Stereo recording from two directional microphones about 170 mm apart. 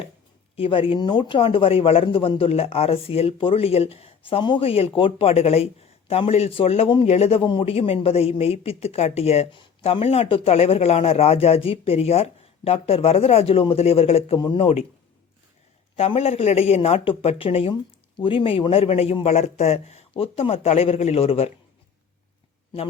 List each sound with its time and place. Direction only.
0.5 s a man's voice: 35° left (ahead or behind)
16.0 s a man's voice: 35° left (ahead or behind)